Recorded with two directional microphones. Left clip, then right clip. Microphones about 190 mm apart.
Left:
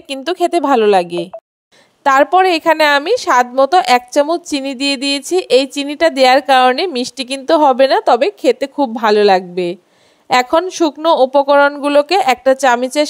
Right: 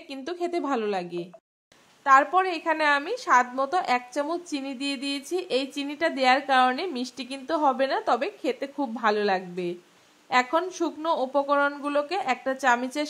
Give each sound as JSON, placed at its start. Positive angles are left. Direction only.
{"t": 0.1, "sound": "a woman's voice", "side_deg": 45}